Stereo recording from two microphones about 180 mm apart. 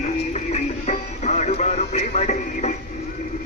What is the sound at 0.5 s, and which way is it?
Music, 40° left (ahead or behind).